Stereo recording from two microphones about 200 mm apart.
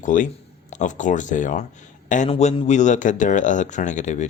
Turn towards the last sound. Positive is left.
turn(degrees=35)  # may be behind; listen again after turning